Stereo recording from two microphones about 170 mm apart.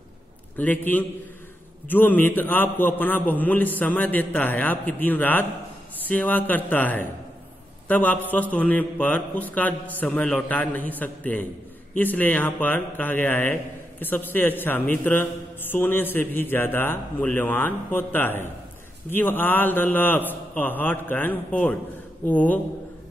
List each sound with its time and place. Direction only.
0.6 s a man's voice: 10° left (ahead or behind)